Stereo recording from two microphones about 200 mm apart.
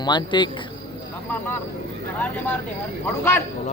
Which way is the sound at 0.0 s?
20° left (ahead or behind).